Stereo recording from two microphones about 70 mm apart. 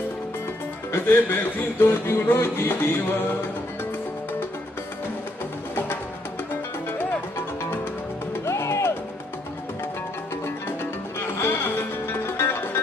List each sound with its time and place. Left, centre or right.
0.9 s music: left
8.3 s music: left
11.3 s music: left